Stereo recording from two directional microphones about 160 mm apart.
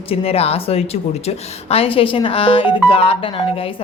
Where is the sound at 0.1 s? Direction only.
40° left (ahead or behind).